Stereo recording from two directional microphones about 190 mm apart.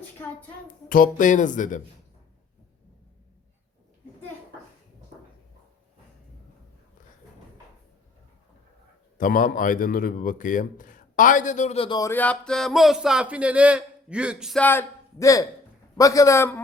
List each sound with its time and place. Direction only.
0.9 s a man's voice: 45° left (ahead or behind)
9.1 s a man's voice: 45° left (ahead or behind)
11.9 s speech: 10° left (ahead or behind); by 14.6 s 5° right (ahead or behind)
14.6 s a man's voice: 10° left (ahead or behind)